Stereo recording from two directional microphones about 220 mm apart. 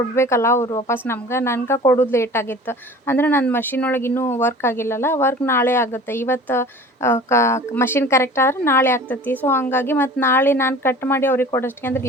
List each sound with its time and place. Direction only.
0.2 s a woman's voice: 10° left (ahead or behind)